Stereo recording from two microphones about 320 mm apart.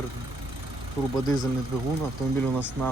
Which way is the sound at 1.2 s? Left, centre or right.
Centre.